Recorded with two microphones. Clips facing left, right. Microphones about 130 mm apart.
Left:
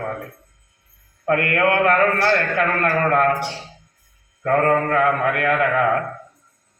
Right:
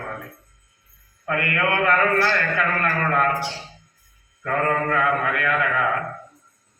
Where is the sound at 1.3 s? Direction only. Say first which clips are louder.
Left 5 dB; 55° left (ahead or behind).